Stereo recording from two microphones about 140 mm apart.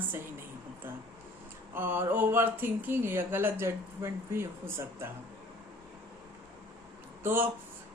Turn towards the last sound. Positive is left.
turn(degrees=-15)  # may be behind; listen again after turning